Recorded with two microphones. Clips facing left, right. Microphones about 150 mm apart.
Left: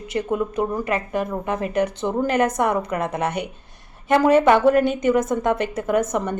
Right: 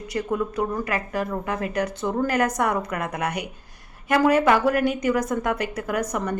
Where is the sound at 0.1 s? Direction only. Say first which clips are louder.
Left 2 dB; 20° left (ahead or behind).